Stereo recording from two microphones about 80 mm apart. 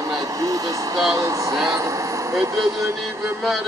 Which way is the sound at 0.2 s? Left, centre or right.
Right.